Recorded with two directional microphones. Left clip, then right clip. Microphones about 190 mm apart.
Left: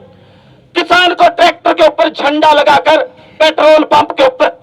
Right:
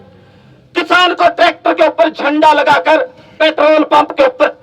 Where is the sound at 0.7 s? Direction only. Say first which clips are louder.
Left 2 dB; 50° right (ahead or behind).